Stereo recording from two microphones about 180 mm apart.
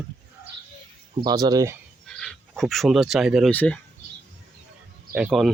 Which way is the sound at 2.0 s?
5° left (ahead or behind).